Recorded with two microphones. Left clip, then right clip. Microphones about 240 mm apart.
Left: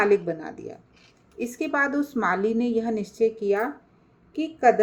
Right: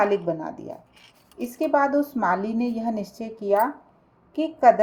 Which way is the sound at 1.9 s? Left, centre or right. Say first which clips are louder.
Right 3 dB; right.